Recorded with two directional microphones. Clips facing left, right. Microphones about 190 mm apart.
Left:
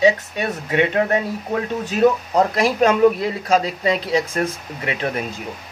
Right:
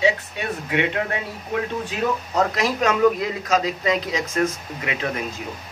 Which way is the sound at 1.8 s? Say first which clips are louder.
Left 8 dB; 30° left (ahead or behind).